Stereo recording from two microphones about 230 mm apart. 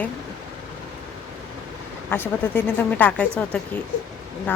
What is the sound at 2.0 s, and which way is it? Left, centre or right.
Speech, centre.